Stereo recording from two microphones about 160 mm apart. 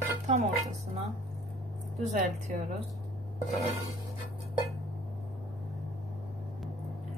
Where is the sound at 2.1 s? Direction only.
50° right (ahead or behind).